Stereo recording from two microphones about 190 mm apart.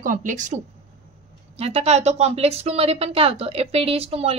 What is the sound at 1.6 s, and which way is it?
Speech, 35° right (ahead or behind).